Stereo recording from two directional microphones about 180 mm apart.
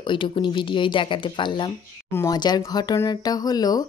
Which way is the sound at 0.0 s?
25° left (ahead or behind).